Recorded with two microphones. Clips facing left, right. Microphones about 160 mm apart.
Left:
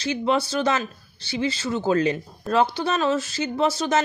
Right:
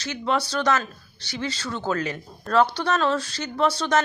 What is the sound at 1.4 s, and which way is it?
A woman's voice, 15° left (ahead or behind).